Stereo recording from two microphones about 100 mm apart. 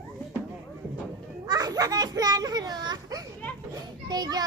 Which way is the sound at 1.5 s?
40° right (ahead or behind).